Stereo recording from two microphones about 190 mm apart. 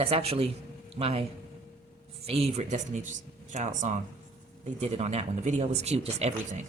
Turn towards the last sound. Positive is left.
turn(degrees=-35)  # may be behind; listen again after turning